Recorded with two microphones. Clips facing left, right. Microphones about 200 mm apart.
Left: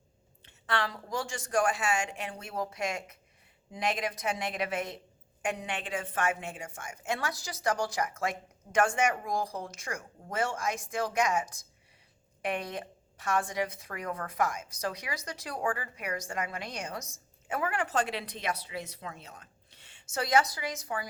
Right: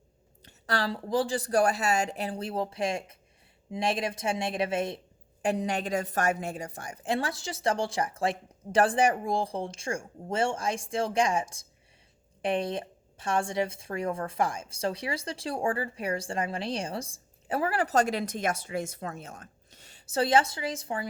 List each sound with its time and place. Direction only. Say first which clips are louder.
0.4 s a woman's voice: right 3 dB; 35° right (ahead or behind)